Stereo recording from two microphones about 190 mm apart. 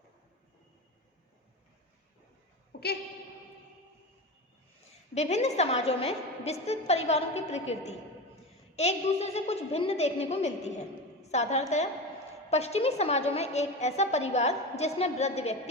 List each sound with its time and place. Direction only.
5.1 s a woman's voice: 35° left (ahead or behind)